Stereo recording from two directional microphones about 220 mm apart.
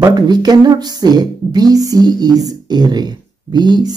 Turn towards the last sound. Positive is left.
turn(degrees=-20)  # may be behind; listen again after turning